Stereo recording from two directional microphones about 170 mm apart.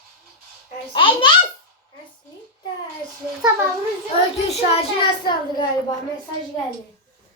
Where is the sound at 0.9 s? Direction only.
30° left (ahead or behind).